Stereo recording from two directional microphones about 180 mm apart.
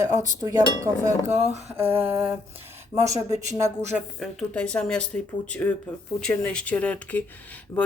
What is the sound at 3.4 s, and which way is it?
Cutlery, 15° right (ahead or behind).